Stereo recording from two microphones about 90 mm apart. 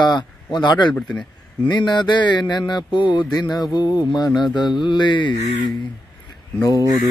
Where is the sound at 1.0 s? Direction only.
10° left (ahead or behind).